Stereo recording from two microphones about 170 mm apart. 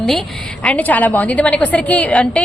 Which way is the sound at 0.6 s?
10° left (ahead or behind).